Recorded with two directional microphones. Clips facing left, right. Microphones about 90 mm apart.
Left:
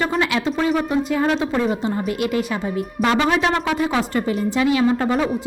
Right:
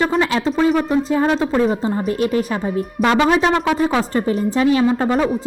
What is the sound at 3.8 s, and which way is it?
A woman's voice, 30° right (ahead or behind).